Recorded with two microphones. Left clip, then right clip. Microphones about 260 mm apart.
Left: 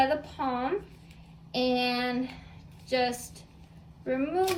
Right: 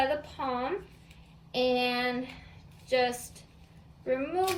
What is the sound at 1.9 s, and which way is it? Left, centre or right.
Speech, centre.